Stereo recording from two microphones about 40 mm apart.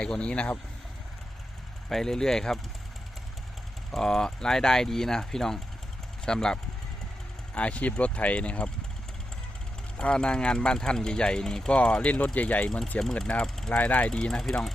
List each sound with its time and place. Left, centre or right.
0.0 s speech: left
1.9 s speech: centre
3.9 s speech: centre
7.5 s speech: left
10.0 s speech: left
12.0 s speech: left
13.1 s speech: left
13.7 s speech: left
14.1 s speech: centre